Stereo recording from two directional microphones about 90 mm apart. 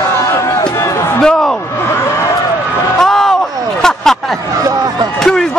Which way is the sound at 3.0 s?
5° left (ahead or behind).